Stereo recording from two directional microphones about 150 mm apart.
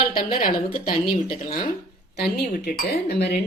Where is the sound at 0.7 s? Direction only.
75° left (ahead or behind).